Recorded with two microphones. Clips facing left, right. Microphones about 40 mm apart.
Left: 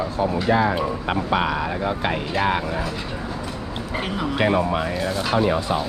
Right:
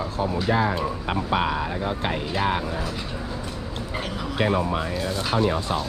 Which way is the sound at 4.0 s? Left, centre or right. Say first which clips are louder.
Left 4 dB; centre.